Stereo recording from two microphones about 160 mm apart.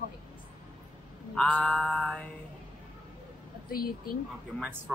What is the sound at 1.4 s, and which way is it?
Mantra, 5° left (ahead or behind).